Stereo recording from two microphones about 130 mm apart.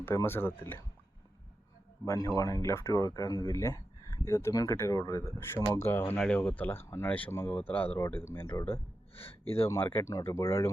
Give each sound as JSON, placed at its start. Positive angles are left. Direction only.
{"t": 0.0, "sound": "speech", "side_deg": 20}
{"t": 2.0, "sound": "speech", "side_deg": 25}
{"t": 9.6, "sound": "speech", "side_deg": 20}